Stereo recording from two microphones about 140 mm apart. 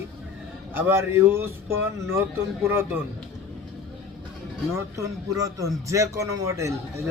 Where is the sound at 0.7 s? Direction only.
15° right (ahead or behind).